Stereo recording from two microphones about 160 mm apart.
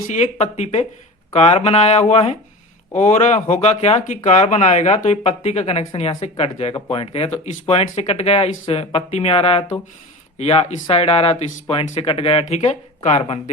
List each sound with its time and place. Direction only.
0.1 s speech: 40° left (ahead or behind)